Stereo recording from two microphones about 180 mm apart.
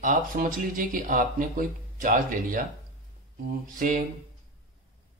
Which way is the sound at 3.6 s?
50° right (ahead or behind).